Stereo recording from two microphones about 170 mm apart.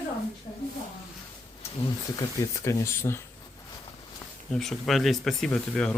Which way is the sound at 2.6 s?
15° left (ahead or behind).